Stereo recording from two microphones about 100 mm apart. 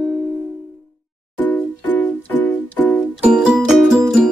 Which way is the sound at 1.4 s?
15° left (ahead or behind).